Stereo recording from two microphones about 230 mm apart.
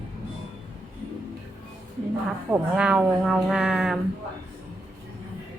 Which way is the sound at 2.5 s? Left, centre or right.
Centre.